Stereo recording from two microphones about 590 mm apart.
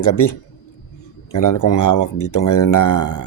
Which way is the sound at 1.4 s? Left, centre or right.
Left.